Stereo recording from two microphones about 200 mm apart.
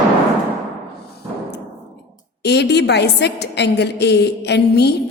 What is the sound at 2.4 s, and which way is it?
A woman's voice, 55° left (ahead or behind).